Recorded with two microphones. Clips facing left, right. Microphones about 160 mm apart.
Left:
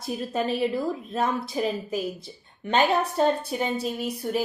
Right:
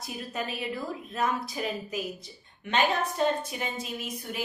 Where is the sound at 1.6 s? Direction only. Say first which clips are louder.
Left 6 dB; 30° left (ahead or behind).